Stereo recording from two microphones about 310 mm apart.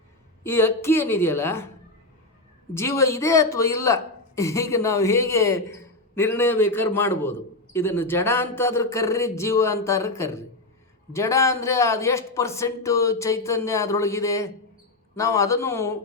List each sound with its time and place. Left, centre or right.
0.4 s speech: centre
2.7 s speech: centre